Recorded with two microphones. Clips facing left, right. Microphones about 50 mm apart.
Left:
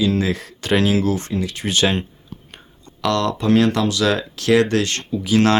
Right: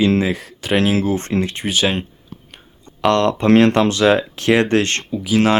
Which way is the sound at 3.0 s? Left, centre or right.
Right.